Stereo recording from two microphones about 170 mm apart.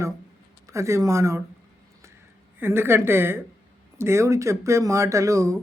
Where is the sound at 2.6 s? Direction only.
15° right (ahead or behind).